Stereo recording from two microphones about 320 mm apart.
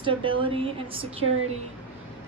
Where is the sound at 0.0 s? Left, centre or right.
Centre.